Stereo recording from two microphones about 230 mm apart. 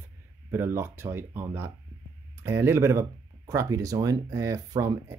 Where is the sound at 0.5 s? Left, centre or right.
Centre.